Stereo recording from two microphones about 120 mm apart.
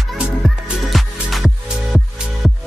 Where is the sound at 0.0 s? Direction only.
Centre (ahead or behind).